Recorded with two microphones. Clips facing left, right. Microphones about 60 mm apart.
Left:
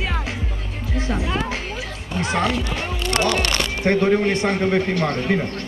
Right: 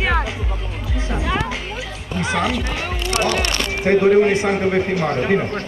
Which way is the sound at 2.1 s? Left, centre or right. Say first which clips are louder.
Right 1 dB; centre.